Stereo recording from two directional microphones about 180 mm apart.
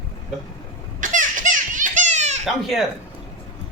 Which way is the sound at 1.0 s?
45° right (ahead or behind).